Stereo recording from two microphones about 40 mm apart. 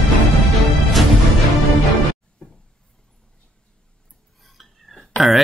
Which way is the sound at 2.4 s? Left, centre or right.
Left.